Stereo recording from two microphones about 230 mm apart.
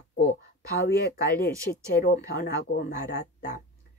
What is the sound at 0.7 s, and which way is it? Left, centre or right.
Speech, left.